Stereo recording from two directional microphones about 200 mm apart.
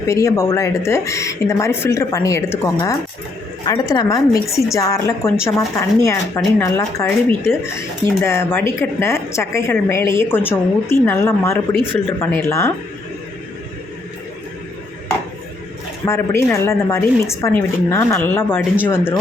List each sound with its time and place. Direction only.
0.1 s speech: 15° left (ahead or behind)
16.0 s speech: 15° left (ahead or behind)